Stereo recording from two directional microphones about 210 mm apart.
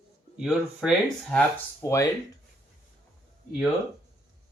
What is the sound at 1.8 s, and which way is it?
Speech, 15° left (ahead or behind).